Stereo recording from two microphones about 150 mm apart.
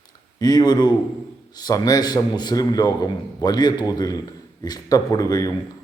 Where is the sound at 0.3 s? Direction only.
25° left (ahead or behind).